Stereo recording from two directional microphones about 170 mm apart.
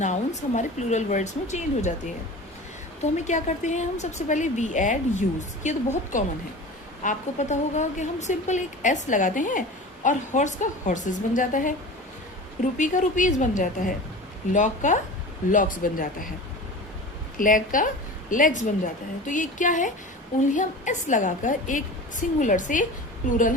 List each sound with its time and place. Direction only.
0.0 s a woman's voice: 45° left (ahead or behind)
3.0 s a woman's voice: 45° left (ahead or behind)
12.7 s a woman's voice: 50° left (ahead or behind)
17.3 s a woman's voice: 50° left (ahead or behind)